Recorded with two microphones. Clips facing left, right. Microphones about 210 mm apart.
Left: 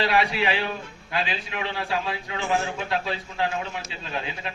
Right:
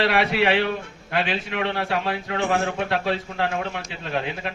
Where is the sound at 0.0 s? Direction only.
60° right (ahead or behind).